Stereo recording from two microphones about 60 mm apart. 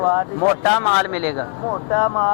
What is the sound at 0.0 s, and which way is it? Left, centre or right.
Speech, centre.